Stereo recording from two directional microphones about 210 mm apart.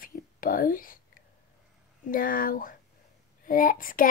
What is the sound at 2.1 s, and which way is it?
Child singing, 40° left (ahead or behind).